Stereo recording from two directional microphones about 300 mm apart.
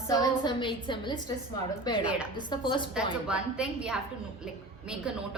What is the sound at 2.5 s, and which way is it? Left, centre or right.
Speech, centre.